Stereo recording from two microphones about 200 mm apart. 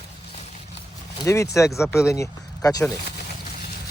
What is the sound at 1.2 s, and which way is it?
Speech, 15° left (ahead or behind).